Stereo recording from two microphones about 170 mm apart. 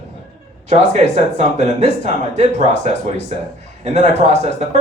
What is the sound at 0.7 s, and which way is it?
Speech, 40° right (ahead or behind).